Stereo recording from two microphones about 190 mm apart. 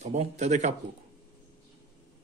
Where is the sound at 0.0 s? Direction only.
35° right (ahead or behind).